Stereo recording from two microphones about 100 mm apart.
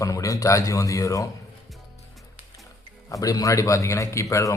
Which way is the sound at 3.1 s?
35° left (ahead or behind).